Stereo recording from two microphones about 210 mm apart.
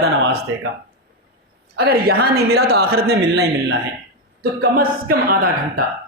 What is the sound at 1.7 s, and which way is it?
A man's voice, 50° right (ahead or behind).